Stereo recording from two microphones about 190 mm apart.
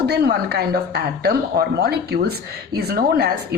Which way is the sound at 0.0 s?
60° right (ahead or behind).